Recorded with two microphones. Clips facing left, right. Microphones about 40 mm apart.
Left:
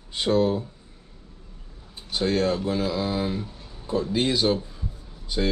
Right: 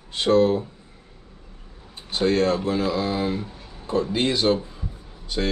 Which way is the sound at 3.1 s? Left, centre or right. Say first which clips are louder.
Right 2 dB; right.